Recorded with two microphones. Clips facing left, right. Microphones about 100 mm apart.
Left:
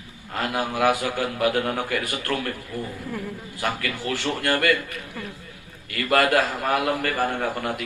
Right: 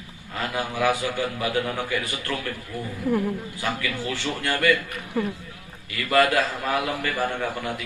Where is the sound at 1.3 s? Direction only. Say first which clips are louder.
Left 3 dB; 50° left (ahead or behind).